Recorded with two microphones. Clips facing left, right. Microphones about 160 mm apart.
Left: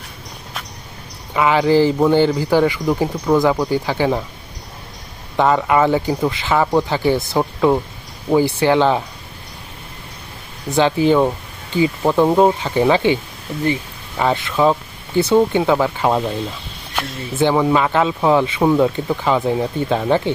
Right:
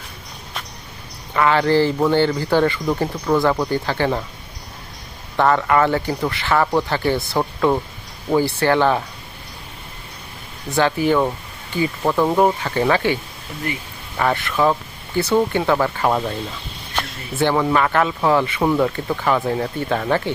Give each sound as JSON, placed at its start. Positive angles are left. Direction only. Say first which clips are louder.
{"t": 1.3, "sound": "speech", "louder": "left 2 dB", "side_deg": 15}
{"t": 5.4, "sound": "speech", "louder": "left 1 dB", "side_deg": 15}
{"t": 10.7, "sound": "speech", "louder": "left 3 dB", "side_deg": 20}
{"t": 14.2, "sound": "speech", "louder": "left 2 dB", "side_deg": 15}
{"t": 17.3, "sound": "speech", "louder": "left 2 dB", "side_deg": 15}